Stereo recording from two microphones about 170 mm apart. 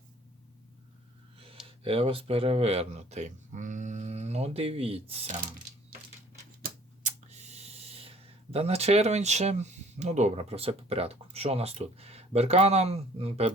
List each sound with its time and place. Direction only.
1.6 s speech: 30° right (ahead or behind)
6.6 s computer keyboard: 45° right (ahead or behind)
8.5 s speech: 35° right (ahead or behind)